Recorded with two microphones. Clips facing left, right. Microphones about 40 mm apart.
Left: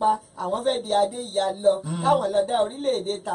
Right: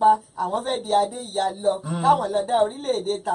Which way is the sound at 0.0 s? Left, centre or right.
Centre.